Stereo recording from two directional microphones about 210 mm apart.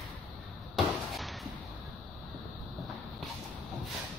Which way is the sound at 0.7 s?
Centre (ahead or behind).